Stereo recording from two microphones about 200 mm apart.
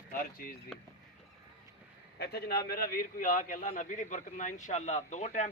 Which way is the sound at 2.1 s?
55° left (ahead or behind).